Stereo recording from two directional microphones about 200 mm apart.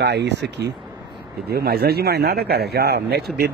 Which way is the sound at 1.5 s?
50° right (ahead or behind).